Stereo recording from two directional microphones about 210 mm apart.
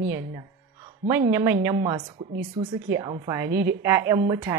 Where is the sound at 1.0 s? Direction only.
15° right (ahead or behind).